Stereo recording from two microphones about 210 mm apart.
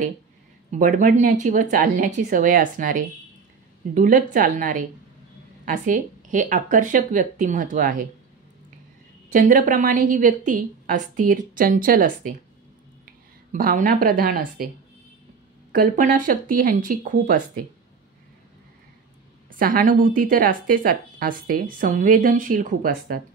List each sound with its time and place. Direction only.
0.7 s a woman's voice: 35° right (ahead or behind)
9.3 s a woman's voice: 40° right (ahead or behind)
15.7 s a woman's voice: 40° right (ahead or behind)
19.6 s a woman's voice: 40° right (ahead or behind)